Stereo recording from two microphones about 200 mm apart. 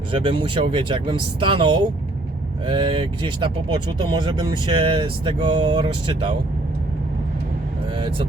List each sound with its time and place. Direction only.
0.1 s speech: 25° right (ahead or behind)
7.9 s speech: 25° right (ahead or behind)